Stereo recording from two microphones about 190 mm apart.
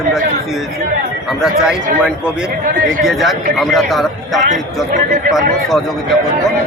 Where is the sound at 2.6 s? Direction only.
45° right (ahead or behind).